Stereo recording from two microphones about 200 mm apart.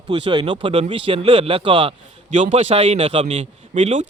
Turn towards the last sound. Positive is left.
turn(degrees=-35)  # may be behind; listen again after turning